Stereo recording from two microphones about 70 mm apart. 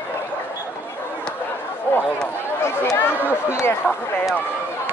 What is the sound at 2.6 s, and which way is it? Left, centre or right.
Chatter, left.